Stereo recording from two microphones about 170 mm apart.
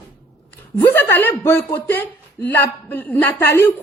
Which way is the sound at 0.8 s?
15° left (ahead or behind).